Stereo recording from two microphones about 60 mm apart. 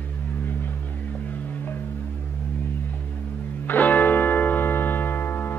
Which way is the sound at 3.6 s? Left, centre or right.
Left.